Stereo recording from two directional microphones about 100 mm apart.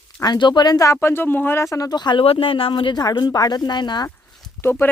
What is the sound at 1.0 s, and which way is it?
Speech, 20° left (ahead or behind).